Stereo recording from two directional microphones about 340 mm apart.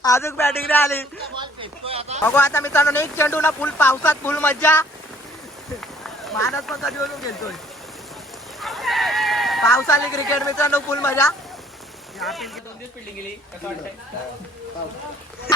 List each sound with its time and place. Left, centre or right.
0.0 s speech: centre
1.4 s speech: centre
2.2 s speech: centre
6.0 s speech: centre
8.6 s speech: centre